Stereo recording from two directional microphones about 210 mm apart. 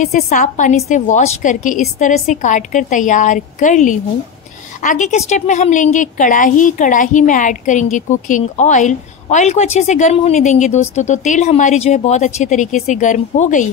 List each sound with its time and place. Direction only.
0.0 s a woman's voice: 35° left (ahead or behind)